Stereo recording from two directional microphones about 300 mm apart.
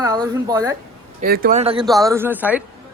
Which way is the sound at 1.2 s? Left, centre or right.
Right.